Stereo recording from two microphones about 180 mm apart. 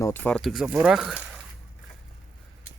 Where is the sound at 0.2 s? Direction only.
5° left (ahead or behind).